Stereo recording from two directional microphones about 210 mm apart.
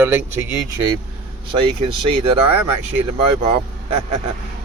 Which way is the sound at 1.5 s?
25° right (ahead or behind).